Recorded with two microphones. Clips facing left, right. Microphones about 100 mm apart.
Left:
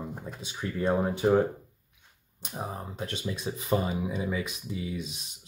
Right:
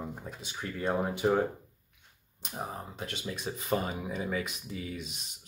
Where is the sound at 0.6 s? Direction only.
35° left (ahead or behind).